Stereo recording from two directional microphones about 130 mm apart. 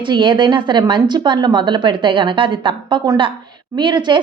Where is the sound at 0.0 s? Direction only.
40° right (ahead or behind).